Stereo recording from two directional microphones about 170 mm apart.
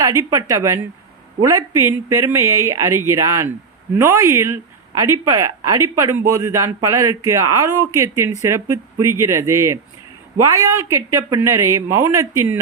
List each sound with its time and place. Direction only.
0.0 s speech: 15° right (ahead or behind)